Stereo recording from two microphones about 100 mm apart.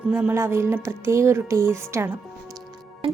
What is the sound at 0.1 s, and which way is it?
Speech, 20° right (ahead or behind).